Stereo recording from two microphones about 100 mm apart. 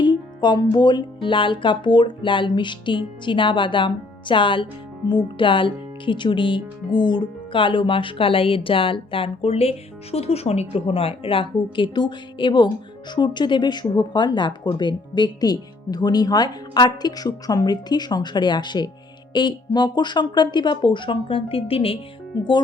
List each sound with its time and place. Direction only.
0.0 s speech: 50° left (ahead or behind); by 21.9 s 70° left (ahead or behind)